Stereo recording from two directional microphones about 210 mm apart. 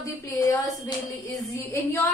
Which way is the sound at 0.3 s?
15° left (ahead or behind).